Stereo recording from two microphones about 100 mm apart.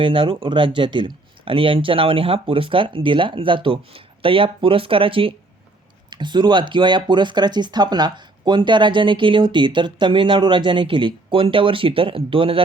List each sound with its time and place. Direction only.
0.0 s speech: 60° right (ahead or behind)
6.1 s speech: 50° right (ahead or behind); by 12.6 s 65° right (ahead or behind)